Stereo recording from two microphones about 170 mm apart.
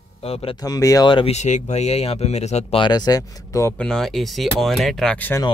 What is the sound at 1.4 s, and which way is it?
Speech, 45° left (ahead or behind).